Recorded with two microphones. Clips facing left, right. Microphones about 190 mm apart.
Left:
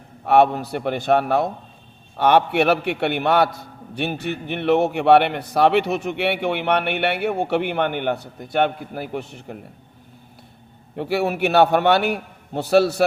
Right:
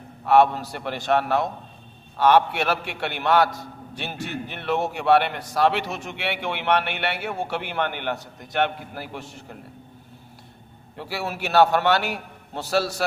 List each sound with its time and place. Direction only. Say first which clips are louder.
0.3 s speech: left 2 dB; 60° left (ahead or behind)
2.1 s speech: left 2 dB; 60° left (ahead or behind)
10.9 s speech: left 9 dB; 60° left (ahead or behind)